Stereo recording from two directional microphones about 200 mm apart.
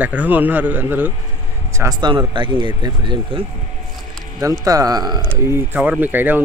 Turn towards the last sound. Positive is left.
turn(degrees=-10)  # may be behind; listen again after turning